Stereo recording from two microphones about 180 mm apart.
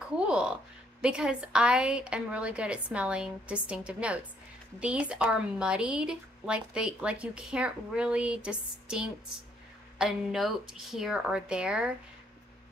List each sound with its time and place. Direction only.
0.3 s a woman's voice: 5° right (ahead or behind)